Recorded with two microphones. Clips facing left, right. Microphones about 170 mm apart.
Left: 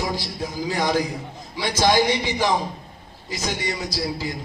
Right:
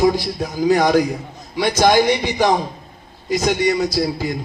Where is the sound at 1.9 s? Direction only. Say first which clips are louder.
Right 3 dB; 55° right (ahead or behind).